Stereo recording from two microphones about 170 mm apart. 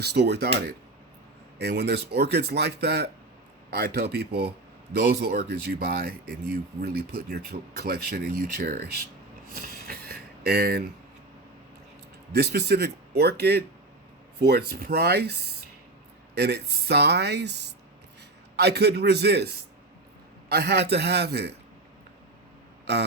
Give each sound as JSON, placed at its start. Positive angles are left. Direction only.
{"t": 0.0, "sound": "speech", "side_deg": -75}
{"t": 1.5, "sound": "speech", "side_deg": -75}
{"t": 9.6, "sound": "a sound", "side_deg": -60}
{"t": 12.3, "sound": "speech", "side_deg": -70}